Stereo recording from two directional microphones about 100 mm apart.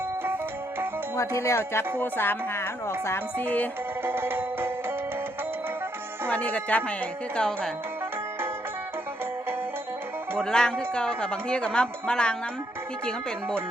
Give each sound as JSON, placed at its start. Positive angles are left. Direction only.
{"t": 1.4, "sound": "speech", "side_deg": 25}
{"t": 4.0, "sound": "music", "side_deg": -25}
{"t": 6.3, "sound": "speech", "side_deg": 15}
{"t": 10.3, "sound": "speech", "side_deg": 5}